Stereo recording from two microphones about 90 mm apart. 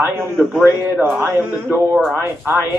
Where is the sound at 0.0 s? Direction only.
20° right (ahead or behind).